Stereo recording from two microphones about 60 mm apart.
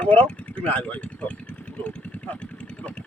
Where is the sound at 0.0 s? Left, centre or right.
Left.